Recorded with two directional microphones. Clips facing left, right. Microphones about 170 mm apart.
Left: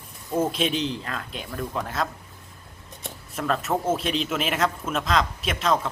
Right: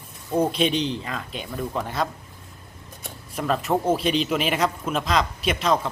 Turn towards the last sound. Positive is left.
turn(degrees=0)  # may be behind; listen again after turning